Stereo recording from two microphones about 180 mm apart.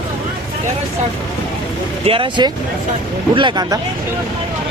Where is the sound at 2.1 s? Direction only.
30° right (ahead or behind).